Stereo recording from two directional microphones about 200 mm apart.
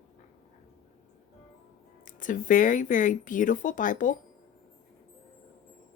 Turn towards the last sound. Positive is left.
turn(degrees=40)  # may be behind; listen again after turning